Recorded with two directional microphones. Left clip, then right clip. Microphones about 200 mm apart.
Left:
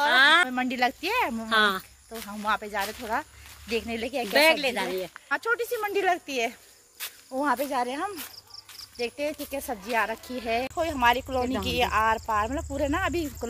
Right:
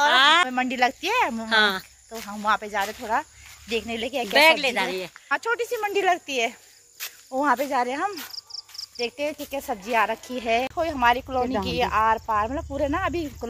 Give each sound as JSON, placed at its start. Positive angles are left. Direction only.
{"t": 0.0, "sound": "a sound", "side_deg": 15}
{"t": 0.5, "sound": "speech", "side_deg": 0}
{"t": 1.5, "sound": "speech", "side_deg": 15}
{"t": 2.2, "sound": "speech", "side_deg": 0}
{"t": 4.3, "sound": "speech", "side_deg": 20}
{"t": 5.3, "sound": "speech", "side_deg": 0}
{"t": 7.3, "sound": "speech", "side_deg": -15}